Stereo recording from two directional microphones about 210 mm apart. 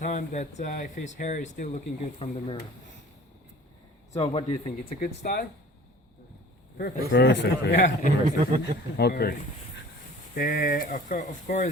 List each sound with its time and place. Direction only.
0.0 s speech: 35° left (ahead or behind)
4.1 s a man's voice: 25° left (ahead or behind)
4.9 s a man's voice: 45° left (ahead or behind)
7.1 s a man's voice: 55° left (ahead or behind)
8.2 s speech: 40° right (ahead or behind)
9.0 s a man's voice: 50° left (ahead or behind)
10.3 s speech: 40° left (ahead or behind)